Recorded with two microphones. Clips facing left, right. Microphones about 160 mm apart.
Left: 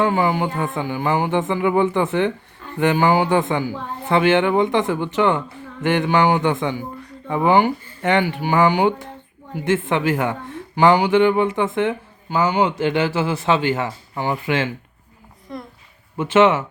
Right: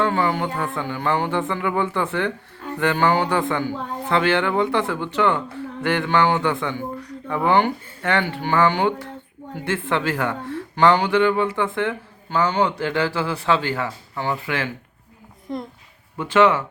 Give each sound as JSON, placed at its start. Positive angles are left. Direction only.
{"t": 0.0, "sound": "speech", "side_deg": 10}
{"t": 16.1, "sound": "speech", "side_deg": 20}